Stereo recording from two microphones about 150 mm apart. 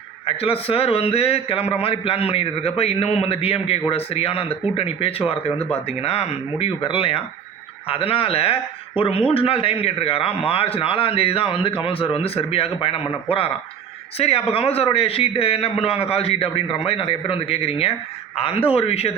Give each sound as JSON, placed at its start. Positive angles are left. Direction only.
{"t": 0.3, "sound": "a man's voice", "side_deg": 40}
{"t": 14.2, "sound": "a man's voice", "side_deg": 40}